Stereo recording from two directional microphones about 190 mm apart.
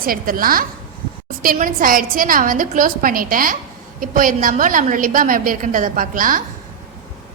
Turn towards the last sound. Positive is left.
turn(degrees=-45)  # may be behind; listen again after turning